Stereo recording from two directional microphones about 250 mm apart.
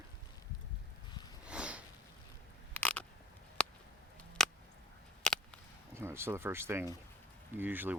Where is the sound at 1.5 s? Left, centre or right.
Centre.